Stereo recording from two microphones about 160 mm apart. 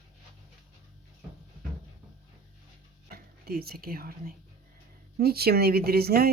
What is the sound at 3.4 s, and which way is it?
Speech, 75° right (ahead or behind).